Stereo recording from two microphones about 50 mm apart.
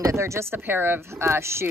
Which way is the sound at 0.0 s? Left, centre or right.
Right.